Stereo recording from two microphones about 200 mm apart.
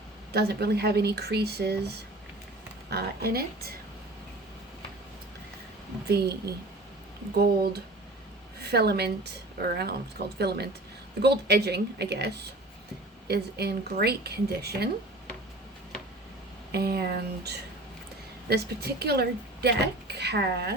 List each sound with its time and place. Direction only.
0.3 s a woman's voice: 55° right (ahead or behind)
2.9 s a woman's voice: 50° right (ahead or behind)
6.1 s a woman's voice: 55° right (ahead or behind)
7.3 s a woman's voice: 50° right (ahead or behind)
16.7 s a woman's voice: 50° right (ahead or behind)